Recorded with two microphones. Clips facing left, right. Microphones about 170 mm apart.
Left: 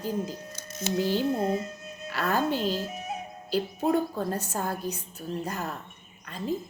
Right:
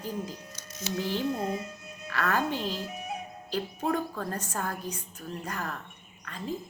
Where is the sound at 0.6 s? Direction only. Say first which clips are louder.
Left 5 dB; 50° left (ahead or behind).